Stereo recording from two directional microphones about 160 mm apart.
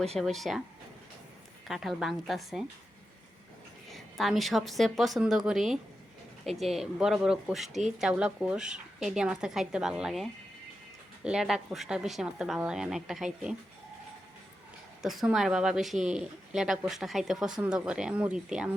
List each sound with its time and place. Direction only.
0.2 s speech: centre (ahead or behind)
1.6 s speech: centre (ahead or behind)
3.8 s speech: centre (ahead or behind)
15.0 s speech: centre (ahead or behind)